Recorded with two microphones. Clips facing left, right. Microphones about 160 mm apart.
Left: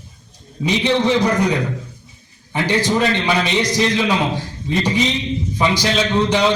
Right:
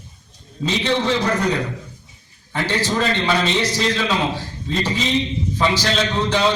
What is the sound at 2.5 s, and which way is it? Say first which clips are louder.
A man's voice: left 4 dB; 15° left (ahead or behind).